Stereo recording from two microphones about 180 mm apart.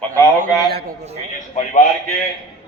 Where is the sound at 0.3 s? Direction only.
60° right (ahead or behind).